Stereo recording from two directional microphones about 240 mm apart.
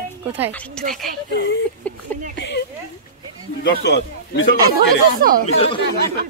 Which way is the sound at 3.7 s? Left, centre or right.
Left.